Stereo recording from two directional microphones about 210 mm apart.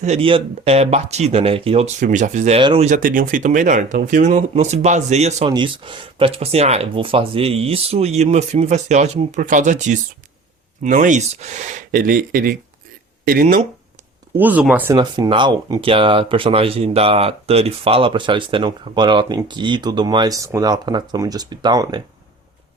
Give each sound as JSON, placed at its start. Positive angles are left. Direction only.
{"t": 0.0, "sound": "speech", "side_deg": -30}
{"t": 14.3, "sound": "speech", "side_deg": -10}
{"t": 14.9, "sound": "speech", "side_deg": -20}